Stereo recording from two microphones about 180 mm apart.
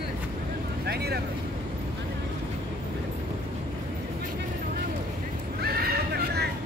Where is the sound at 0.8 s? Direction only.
65° right (ahead or behind).